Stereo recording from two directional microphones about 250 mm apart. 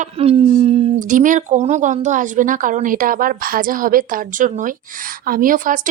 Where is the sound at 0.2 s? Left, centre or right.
Right.